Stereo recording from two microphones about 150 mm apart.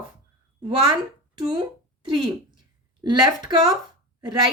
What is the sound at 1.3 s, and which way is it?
A woman's voice, 30° right (ahead or behind).